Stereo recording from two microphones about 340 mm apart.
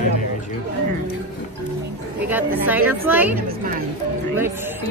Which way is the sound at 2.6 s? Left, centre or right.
Centre.